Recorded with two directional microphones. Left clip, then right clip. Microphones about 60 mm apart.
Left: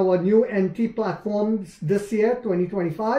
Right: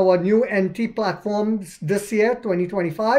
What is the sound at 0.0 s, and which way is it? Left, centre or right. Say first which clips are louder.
A woman's voice: right 2 dB; right.